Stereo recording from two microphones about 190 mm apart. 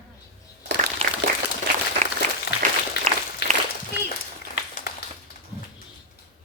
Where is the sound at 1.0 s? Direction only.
35° right (ahead or behind).